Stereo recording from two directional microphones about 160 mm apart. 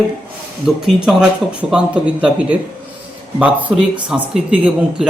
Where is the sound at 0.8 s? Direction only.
5° right (ahead or behind).